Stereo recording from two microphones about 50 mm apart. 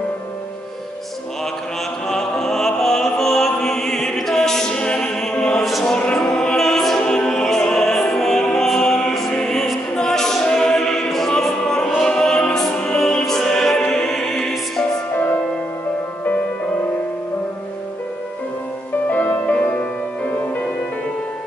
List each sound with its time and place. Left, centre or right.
2.0 s music: centre
9.9 s choir: centre
11.3 s music: centre
13.0 s music: centre
19.0 s music: left